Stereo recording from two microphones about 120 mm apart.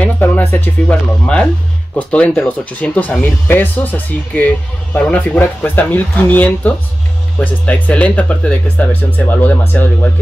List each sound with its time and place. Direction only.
0.0 s speech: 15° left (ahead or behind)